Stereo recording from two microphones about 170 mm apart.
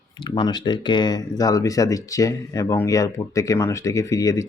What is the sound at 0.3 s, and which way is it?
Speech, 25° left (ahead or behind).